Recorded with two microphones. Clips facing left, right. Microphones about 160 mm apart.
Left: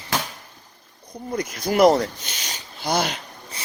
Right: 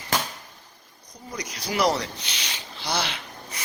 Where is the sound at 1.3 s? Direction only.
50° left (ahead or behind).